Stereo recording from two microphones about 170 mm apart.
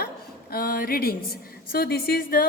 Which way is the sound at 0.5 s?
60° left (ahead or behind).